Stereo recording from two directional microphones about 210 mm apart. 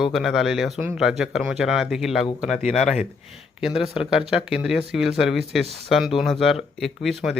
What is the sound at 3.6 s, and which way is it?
Speech, centre (ahead or behind).